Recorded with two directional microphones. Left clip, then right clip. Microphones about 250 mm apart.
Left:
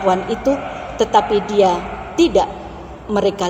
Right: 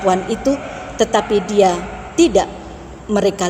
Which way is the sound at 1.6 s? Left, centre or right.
Right.